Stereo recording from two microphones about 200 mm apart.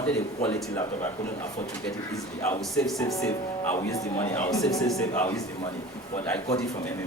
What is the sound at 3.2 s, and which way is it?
Speech, 10° left (ahead or behind).